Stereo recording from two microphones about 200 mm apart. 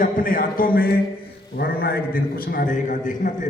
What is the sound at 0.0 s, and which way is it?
A man's voice, 45° left (ahead or behind).